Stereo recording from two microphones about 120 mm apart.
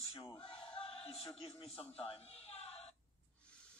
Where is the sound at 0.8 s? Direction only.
50° left (ahead or behind).